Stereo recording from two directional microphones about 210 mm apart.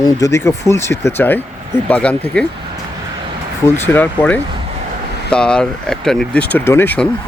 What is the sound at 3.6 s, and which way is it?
Speech, 5° left (ahead or behind).